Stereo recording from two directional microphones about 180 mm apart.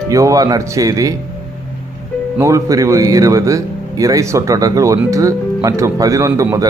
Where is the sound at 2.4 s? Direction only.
20° right (ahead or behind).